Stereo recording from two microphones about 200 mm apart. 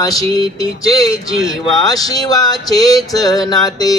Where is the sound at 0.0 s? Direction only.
15° left (ahead or behind).